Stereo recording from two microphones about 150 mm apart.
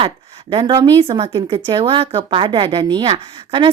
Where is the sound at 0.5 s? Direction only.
35° right (ahead or behind).